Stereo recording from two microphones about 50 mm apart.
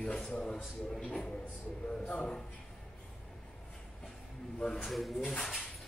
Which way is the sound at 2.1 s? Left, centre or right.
Left.